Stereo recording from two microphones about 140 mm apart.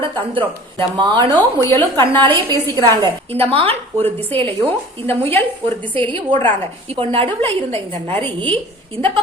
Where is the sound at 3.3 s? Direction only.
45° right (ahead or behind).